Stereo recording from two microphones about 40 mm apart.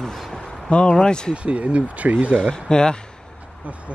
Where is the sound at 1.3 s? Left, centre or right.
Right.